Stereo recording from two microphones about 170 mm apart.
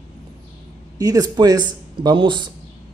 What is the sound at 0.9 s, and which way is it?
Speech, 20° right (ahead or behind).